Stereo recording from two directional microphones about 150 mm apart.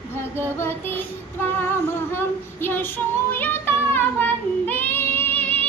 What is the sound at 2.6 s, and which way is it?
Child singing, 15° left (ahead or behind).